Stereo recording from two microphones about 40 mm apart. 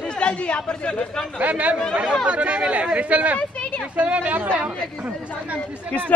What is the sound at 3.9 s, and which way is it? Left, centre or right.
Speech, right.